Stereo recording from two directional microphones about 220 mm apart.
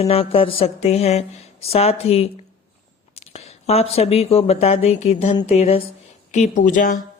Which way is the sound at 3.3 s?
30° left (ahead or behind).